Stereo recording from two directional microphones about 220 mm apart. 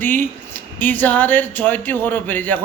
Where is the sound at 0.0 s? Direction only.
10° left (ahead or behind).